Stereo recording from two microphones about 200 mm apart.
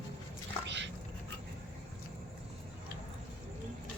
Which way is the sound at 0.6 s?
60° right (ahead or behind).